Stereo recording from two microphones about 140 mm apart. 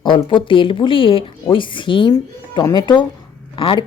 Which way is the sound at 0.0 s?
35° left (ahead or behind).